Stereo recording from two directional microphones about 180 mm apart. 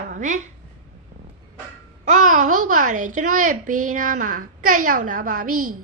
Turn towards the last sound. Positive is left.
turn(degrees=-50)  # may be behind; listen again after turning